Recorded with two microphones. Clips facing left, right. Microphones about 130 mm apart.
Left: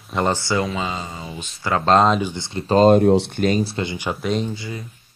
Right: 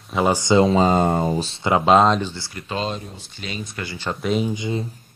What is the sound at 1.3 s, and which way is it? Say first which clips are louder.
Speech: right 6 dB; 30° right (ahead or behind).